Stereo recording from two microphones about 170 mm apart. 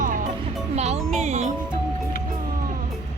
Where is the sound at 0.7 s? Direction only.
40° right (ahead or behind).